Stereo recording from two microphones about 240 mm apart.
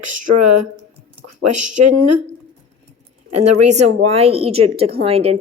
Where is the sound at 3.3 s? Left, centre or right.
Right.